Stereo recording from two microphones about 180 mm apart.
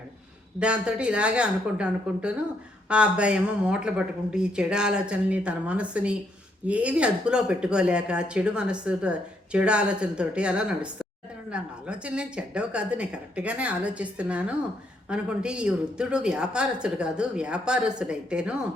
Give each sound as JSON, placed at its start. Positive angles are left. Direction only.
{"t": 0.6, "sound": "speech", "side_deg": -5}